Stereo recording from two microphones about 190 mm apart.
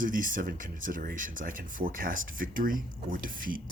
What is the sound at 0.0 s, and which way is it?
Speech, 45° right (ahead or behind).